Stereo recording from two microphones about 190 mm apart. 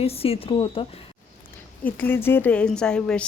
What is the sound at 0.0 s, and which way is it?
Speech, 30° left (ahead or behind).